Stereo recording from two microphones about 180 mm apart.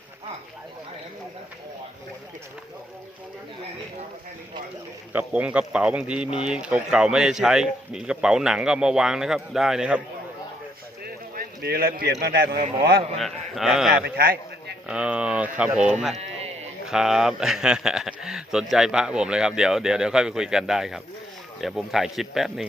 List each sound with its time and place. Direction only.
5.1 s a man's voice: 5° right (ahead or behind)
11.0 s clip-clop: 60° right (ahead or behind)
12.2 s a man's voice: 60° right (ahead or behind)
13.1 s a man's voice: centre (ahead or behind)
14.0 s a man's voice: 55° right (ahead or behind)
14.8 s speech: 5° right (ahead or behind)
16.1 s sheep: 35° right (ahead or behind)
16.8 s a man's voice: 5° right (ahead or behind)